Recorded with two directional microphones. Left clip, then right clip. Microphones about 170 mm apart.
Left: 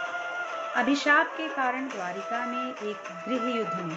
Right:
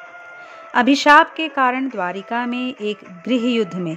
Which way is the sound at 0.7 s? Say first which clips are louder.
Right 12 dB; 90° right.